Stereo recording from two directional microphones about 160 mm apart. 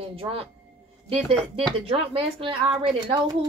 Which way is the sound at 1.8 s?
35° right (ahead or behind).